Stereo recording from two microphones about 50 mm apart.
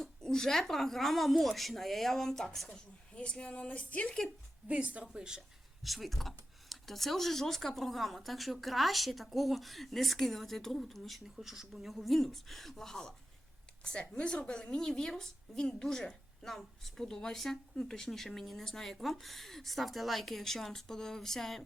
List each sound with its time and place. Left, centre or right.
0.0 s a woman's voice: centre
4.7 s a woman's voice: right
5.0 s a woman's voice: centre
5.8 s a woman's voice: centre